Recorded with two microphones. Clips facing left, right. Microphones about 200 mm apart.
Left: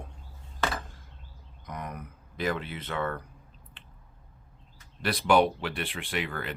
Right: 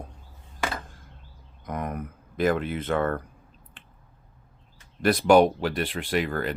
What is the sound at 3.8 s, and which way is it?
Squish, 50° right (ahead or behind).